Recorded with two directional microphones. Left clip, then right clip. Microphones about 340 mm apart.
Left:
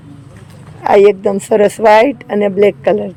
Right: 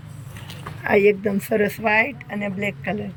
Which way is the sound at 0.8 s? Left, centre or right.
Centre.